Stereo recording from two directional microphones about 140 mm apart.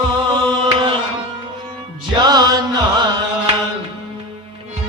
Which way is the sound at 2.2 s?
30° right (ahead or behind).